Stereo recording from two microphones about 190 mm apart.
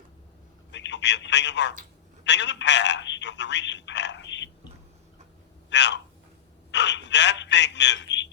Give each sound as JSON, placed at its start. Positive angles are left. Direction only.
{"t": 0.7, "sound": "speech", "side_deg": 70}
{"t": 5.7, "sound": "a man's voice", "side_deg": 65}